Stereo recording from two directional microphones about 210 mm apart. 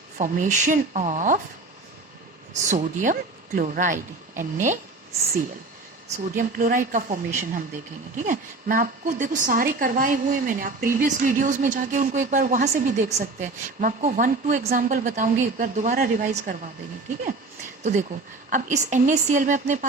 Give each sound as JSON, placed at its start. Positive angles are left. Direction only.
{"t": 0.2, "sound": "a woman's voice", "side_deg": -35}
{"t": 2.6, "sound": "a woman's voice", "side_deg": -35}
{"t": 6.2, "sound": "a woman's voice", "side_deg": -40}
{"t": 18.5, "sound": "a woman's voice", "side_deg": -35}